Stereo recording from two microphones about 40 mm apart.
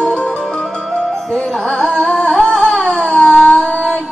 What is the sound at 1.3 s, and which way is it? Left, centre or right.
Carnatic music, centre.